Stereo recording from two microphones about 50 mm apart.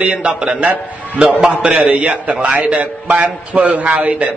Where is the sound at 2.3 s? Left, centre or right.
Centre; by 4.3 s right.